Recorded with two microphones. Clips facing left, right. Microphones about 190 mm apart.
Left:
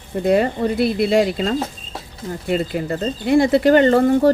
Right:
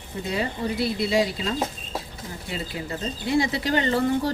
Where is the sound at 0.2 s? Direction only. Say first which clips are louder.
Left 11 dB; 55° left (ahead or behind).